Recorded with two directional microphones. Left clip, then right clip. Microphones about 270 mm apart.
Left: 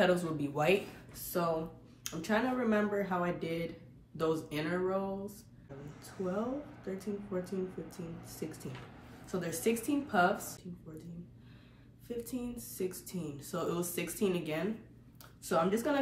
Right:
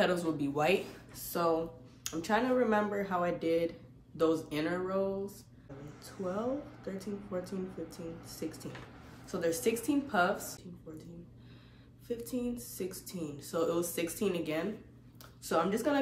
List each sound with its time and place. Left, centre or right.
0.0 s speech: centre
6.8 s speech: centre
12.2 s speech: centre